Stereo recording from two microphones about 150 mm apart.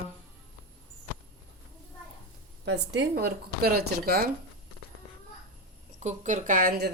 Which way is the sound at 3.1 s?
90° right.